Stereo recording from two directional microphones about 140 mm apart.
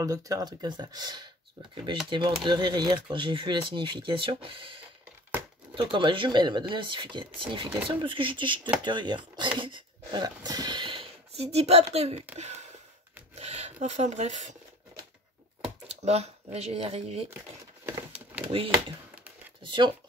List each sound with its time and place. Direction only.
0.0 s speech: 25° right (ahead or behind); by 12.6 s 55° right (ahead or behind)
13.3 s filing: 50° right (ahead or behind)
15.6 s speech: 50° right (ahead or behind)
18.5 s speech: 40° right (ahead or behind)